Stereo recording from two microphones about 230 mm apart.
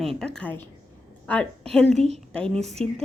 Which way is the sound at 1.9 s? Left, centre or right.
Right.